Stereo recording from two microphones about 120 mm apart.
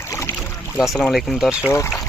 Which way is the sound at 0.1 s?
25° left (ahead or behind).